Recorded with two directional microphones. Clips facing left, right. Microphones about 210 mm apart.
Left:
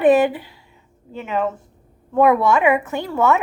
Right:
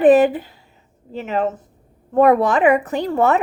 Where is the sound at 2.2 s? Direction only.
35° right (ahead or behind).